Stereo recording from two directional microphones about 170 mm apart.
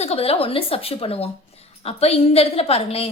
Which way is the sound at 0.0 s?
35° left (ahead or behind).